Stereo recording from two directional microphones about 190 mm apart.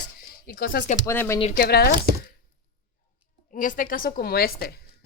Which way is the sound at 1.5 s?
55° left (ahead or behind).